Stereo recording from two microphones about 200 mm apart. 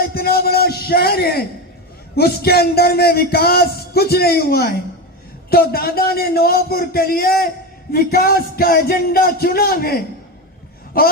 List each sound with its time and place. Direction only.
0.0 s music: 50° left (ahead or behind)
2.1 s speech: 50° left (ahead or behind)